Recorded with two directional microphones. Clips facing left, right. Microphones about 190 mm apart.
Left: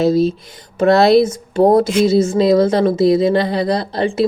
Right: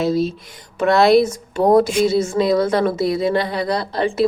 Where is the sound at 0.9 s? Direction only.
30° left (ahead or behind).